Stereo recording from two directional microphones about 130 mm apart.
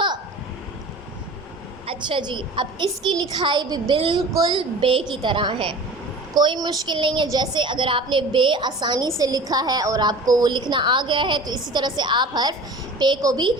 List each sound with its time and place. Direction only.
1.9 s a woman's voice: 40° right (ahead or behind)
4.3 s speech: 25° right (ahead or behind)
4.8 s a woman's voice: 40° right (ahead or behind)